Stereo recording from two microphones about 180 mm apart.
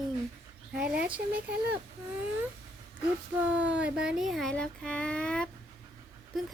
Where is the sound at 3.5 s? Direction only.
5° right (ahead or behind).